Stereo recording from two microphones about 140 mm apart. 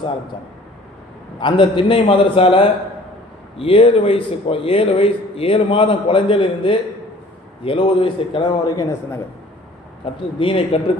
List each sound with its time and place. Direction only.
1.4 s a man's voice: 35° left (ahead or behind)
10.3 s a man's voice: 40° left (ahead or behind)